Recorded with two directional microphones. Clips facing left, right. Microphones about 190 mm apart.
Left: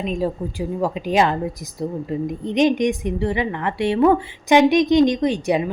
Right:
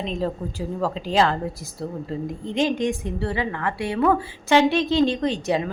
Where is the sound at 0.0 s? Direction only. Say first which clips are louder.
Left 3 dB; 10° left (ahead or behind).